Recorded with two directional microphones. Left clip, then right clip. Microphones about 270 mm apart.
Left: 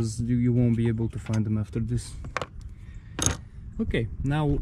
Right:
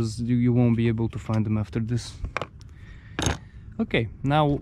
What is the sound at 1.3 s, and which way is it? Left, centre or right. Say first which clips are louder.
Speech: right 3 dB; right.